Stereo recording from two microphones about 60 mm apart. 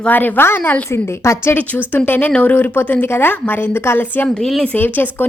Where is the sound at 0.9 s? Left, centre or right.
Left.